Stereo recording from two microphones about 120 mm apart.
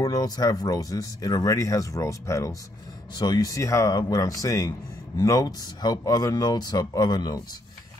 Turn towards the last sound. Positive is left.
turn(degrees=35)  # may be behind; listen again after turning